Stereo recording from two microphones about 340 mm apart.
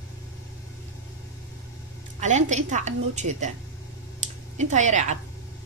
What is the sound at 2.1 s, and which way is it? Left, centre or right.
A woman's voice, right.